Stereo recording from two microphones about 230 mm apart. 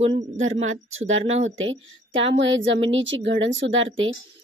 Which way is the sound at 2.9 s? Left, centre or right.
Right.